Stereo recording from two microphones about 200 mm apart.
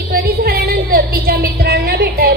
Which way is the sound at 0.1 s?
50° right (ahead or behind).